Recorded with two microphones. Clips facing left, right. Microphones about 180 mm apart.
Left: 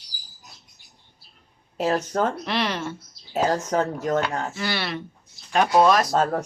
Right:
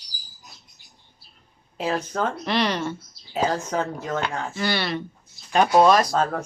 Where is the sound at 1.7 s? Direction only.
40° left (ahead or behind).